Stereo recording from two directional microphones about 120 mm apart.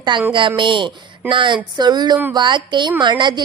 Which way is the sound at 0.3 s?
45° right (ahead or behind).